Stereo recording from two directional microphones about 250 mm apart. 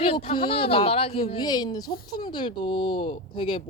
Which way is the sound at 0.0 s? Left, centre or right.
Left.